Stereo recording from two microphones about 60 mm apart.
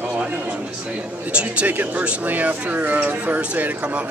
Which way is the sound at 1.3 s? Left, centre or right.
Centre.